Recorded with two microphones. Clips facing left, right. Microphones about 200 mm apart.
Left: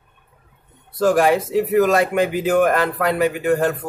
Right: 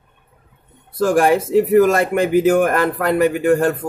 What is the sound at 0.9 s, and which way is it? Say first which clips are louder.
Speech: right 1 dB; 45° right (ahead or behind).